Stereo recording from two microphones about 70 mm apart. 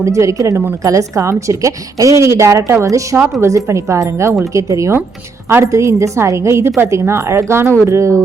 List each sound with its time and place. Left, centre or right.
0.0 s a woman's voice: right